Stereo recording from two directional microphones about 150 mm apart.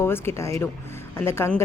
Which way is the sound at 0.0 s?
15° left (ahead or behind).